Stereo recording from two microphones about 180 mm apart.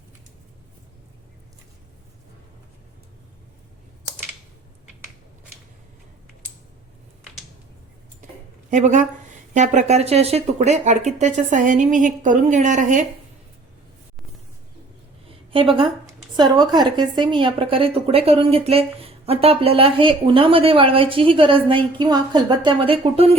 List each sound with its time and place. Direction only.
8.7 s speech: 45° right (ahead or behind)
15.5 s a woman's voice: 30° right (ahead or behind)